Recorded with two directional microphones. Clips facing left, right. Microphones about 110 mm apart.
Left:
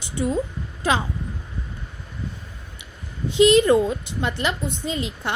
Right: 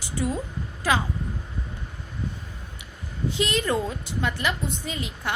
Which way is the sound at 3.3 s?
20° left (ahead or behind).